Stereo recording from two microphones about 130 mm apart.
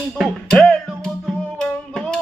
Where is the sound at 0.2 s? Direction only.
Centre (ahead or behind).